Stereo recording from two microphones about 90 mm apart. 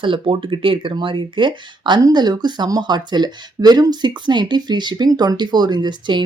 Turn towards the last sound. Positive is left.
turn(degrees=-55)  # may be behind; listen again after turning